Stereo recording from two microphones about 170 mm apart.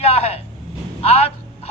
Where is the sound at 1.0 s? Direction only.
35° left (ahead or behind).